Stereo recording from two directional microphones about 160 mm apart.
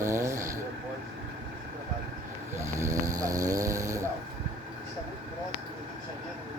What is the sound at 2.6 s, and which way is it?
Snoring, 20° right (ahead or behind).